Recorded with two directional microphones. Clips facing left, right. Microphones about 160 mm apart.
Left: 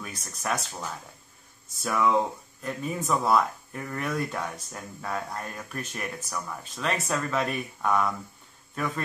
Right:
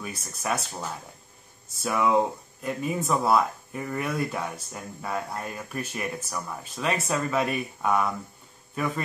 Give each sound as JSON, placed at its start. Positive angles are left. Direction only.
{"t": 0.0, "sound": "a man's voice", "side_deg": -5}